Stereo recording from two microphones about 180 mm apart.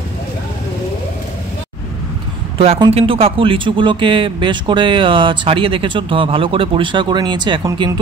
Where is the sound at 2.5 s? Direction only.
30° right (ahead or behind).